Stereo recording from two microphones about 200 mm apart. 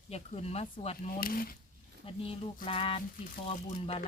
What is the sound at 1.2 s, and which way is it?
Speech, 45° left (ahead or behind).